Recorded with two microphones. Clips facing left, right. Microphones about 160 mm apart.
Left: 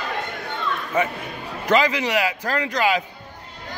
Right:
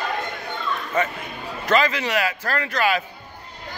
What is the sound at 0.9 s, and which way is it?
A man's voice, 10° left (ahead or behind).